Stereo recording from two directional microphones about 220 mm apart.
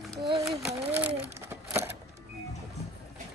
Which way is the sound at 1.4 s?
10° right (ahead or behind).